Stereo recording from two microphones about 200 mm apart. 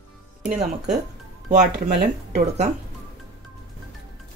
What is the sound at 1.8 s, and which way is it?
Speech, 35° right (ahead or behind).